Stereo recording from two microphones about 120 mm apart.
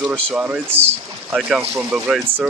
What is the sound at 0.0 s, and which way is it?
Speech, 15° right (ahead or behind).